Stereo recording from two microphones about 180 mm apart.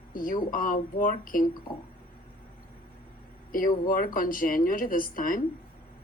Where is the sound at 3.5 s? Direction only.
50° left (ahead or behind).